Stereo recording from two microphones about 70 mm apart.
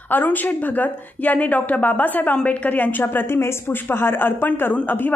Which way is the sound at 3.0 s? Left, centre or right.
Left.